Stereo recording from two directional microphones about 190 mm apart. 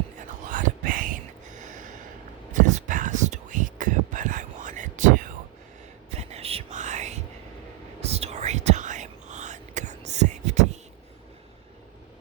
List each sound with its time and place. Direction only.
0.4 s whispering: 45° right (ahead or behind)